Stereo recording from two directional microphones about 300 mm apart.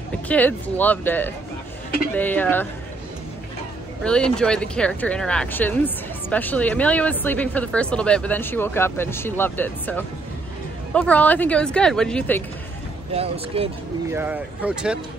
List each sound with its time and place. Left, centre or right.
0.3 s speech: centre
4.0 s speech: centre
13.1 s speech: centre
14.1 s speech: centre